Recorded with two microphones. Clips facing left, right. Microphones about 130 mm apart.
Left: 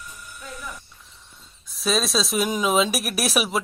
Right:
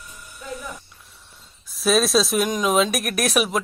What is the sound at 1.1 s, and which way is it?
Speech, 5° right (ahead or behind).